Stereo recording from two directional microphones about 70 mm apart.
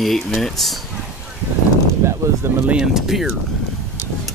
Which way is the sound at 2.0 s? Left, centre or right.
Right.